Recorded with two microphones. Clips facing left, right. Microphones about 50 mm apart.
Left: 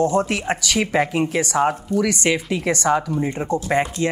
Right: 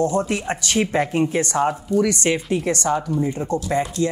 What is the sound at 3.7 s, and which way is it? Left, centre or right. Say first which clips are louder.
Speech: left 2 dB; left.